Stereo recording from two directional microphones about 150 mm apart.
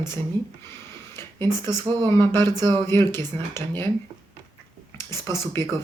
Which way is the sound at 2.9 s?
15° left (ahead or behind).